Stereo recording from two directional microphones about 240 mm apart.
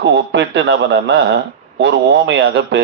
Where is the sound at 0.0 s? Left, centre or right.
Right.